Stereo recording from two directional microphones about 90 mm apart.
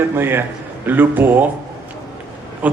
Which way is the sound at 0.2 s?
25° right (ahead or behind).